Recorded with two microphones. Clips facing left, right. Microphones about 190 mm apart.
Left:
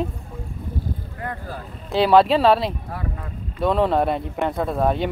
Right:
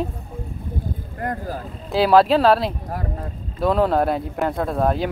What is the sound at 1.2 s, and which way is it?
Speech, 40° right (ahead or behind).